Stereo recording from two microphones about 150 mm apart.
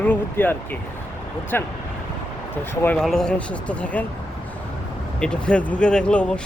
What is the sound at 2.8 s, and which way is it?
Speech, 5° left (ahead or behind).